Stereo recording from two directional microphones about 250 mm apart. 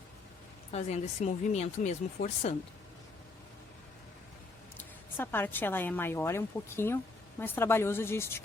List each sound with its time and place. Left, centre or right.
0.7 s speech: left
4.8 s speech: centre